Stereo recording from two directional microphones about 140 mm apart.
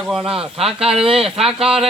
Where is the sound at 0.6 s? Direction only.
45° right (ahead or behind).